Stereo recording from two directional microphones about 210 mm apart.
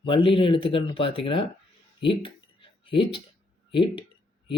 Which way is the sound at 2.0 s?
25° left (ahead or behind).